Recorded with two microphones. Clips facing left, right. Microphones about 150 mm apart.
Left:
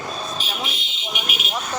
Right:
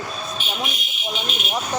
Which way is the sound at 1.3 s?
5° left (ahead or behind).